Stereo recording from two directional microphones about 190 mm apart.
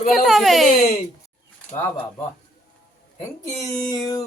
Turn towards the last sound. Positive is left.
turn(degrees=20)  # may be behind; listen again after turning